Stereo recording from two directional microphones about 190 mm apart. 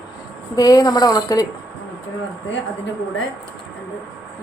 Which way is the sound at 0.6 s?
20° left (ahead or behind).